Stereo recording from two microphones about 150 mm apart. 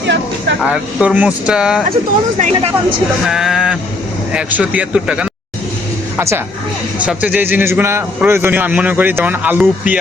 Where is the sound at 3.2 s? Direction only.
5° right (ahead or behind).